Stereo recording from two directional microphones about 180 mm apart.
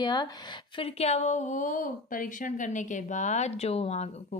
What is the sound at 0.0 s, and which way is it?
Speech, 25° left (ahead or behind).